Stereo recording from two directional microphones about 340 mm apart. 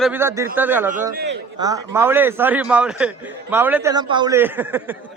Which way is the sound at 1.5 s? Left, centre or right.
Centre.